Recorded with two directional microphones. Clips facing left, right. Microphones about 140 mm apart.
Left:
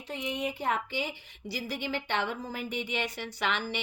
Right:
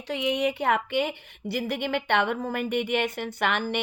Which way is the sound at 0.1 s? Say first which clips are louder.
Right 8 dB; 80° right.